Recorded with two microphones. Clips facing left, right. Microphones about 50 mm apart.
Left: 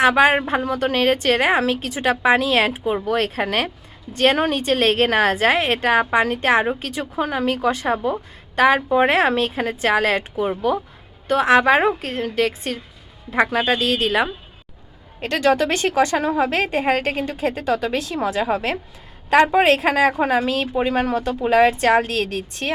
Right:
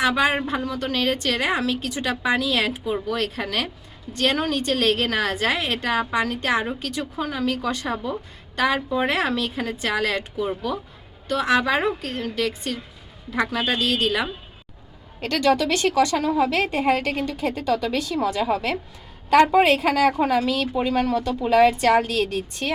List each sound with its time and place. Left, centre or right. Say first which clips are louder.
0.0 s a woman's voice: left 6 dB; left
15.4 s a woman's voice: left 2 dB; left